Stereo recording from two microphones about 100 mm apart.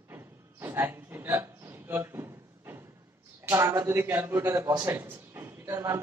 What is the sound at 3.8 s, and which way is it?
A man's voice, 25° right (ahead or behind).